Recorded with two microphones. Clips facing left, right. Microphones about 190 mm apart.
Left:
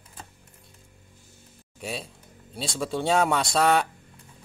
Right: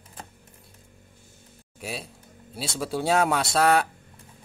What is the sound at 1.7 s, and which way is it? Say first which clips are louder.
Speech: left 1 dB; 5° right (ahead or behind).